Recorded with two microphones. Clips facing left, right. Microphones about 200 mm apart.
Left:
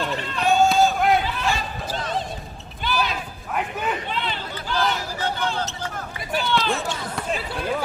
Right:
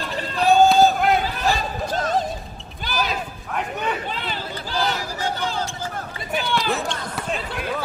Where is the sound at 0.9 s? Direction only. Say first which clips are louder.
Even; centre (ahead or behind).